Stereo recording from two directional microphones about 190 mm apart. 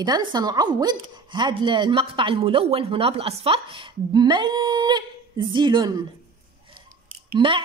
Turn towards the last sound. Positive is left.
turn(degrees=-25)  # may be behind; listen again after turning